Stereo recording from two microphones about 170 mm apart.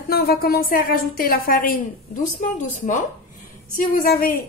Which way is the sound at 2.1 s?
50° left (ahead or behind).